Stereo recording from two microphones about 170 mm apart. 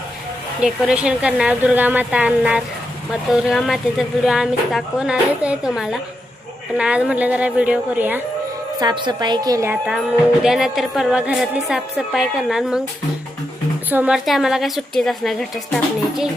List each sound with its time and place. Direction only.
0.6 s a woman's voice: 5° right (ahead or behind)
3.2 s music: 5° right (ahead or behind)
6.7 s a woman's voice: 5° right (ahead or behind)
8.8 s a woman's voice: 25° right (ahead or behind)
9.8 s music: 5° right (ahead or behind)
13.9 s music: 5° right (ahead or behind)